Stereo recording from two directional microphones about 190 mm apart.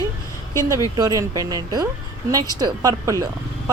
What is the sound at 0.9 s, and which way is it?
Speech, 20° right (ahead or behind).